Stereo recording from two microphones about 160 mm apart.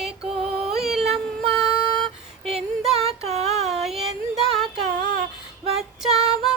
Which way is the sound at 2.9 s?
40° right (ahead or behind).